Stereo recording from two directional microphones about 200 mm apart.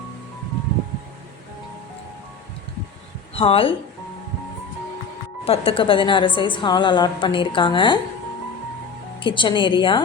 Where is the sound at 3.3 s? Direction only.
30° left (ahead or behind).